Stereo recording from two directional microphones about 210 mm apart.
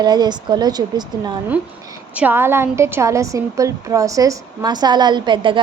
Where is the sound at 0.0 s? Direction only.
20° right (ahead or behind).